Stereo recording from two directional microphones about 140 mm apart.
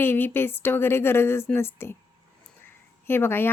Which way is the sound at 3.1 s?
15° left (ahead or behind).